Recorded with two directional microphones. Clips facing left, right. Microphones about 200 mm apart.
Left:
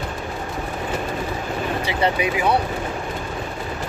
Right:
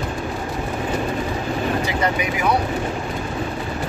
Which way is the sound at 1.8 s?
30° left (ahead or behind).